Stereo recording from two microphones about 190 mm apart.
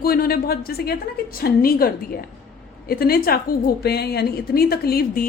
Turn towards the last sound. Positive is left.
turn(degrees=55)  # may be behind; listen again after turning